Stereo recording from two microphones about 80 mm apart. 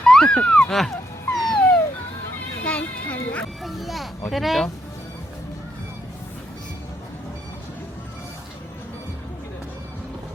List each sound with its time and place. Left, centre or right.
0.0 s a sound: centre
1.3 s dog: centre
2.6 s music: centre
3.6 s a child's voice: centre